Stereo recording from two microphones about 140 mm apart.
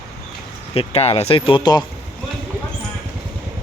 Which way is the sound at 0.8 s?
45° left (ahead or behind).